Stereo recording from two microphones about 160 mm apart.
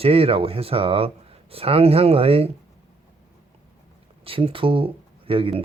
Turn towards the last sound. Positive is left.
turn(degrees=-35)  # may be behind; listen again after turning